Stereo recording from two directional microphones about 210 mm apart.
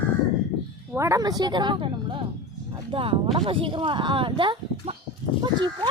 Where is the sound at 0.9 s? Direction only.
15° right (ahead or behind).